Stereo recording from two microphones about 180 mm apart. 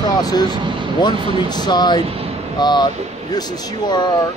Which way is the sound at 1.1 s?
30° right (ahead or behind).